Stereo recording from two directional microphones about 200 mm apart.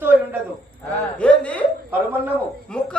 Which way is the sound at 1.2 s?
5° left (ahead or behind).